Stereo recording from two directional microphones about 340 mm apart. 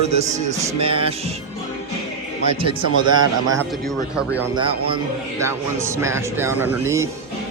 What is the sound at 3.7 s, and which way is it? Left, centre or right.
Speech, centre.